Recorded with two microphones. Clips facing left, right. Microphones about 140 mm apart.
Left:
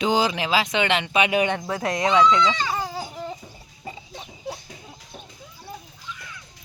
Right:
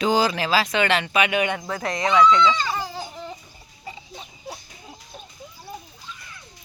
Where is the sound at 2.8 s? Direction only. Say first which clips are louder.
Left 2 dB; 10° left (ahead or behind).